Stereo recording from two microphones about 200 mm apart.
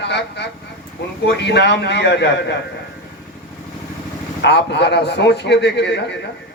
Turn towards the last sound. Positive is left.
turn(degrees=60)  # may be behind; listen again after turning